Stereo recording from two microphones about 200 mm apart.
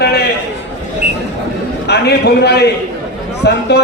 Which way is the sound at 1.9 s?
55° left (ahead or behind).